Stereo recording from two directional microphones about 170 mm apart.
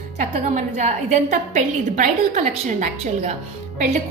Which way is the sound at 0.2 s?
45° right (ahead or behind).